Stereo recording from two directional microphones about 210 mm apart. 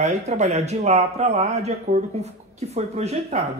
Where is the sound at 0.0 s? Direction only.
35° right (ahead or behind).